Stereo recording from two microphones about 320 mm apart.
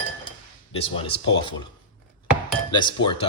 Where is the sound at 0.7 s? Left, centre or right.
Centre.